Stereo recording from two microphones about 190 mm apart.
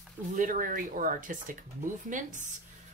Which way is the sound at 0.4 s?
45° right (ahead or behind).